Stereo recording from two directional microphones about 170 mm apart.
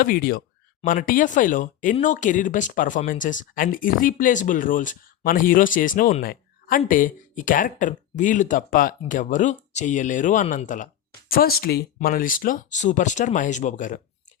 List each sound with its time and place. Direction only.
0.0 s speech: 60° left (ahead or behind)
11.3 s speech: 60° left (ahead or behind)
11.9 s speech: 55° left (ahead or behind)